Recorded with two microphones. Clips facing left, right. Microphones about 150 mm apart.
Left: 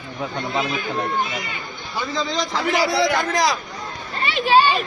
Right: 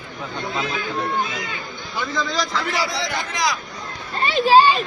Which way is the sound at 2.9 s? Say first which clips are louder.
Left 7 dB; 65° left (ahead or behind).